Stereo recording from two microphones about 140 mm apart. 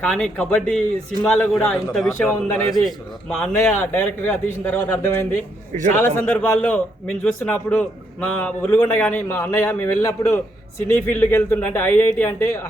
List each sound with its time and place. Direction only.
0.0 s a man's voice: 10° left (ahead or behind)
2.0 s a man's voice: 15° left (ahead or behind)
2.6 s a man's voice: centre (ahead or behind); by 12.6 s 15° left (ahead or behind)